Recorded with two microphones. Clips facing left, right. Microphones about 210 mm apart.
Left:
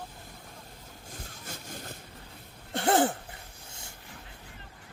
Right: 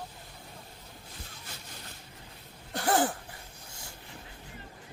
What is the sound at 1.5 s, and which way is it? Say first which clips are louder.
Vehicle: left 9 dB; 45° left (ahead or behind).